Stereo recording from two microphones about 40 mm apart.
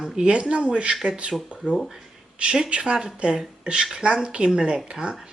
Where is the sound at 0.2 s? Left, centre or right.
Right.